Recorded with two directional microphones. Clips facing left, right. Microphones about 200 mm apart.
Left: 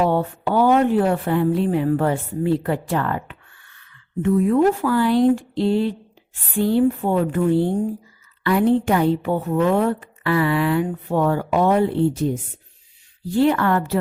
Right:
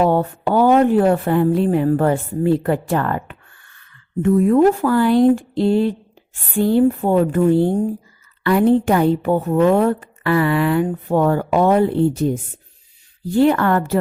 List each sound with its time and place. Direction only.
0.0 s a woman's voice: 45° right (ahead or behind)
13.3 s a woman's voice: 50° right (ahead or behind)